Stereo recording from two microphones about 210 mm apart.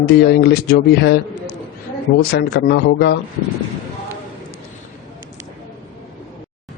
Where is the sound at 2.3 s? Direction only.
50° left (ahead or behind).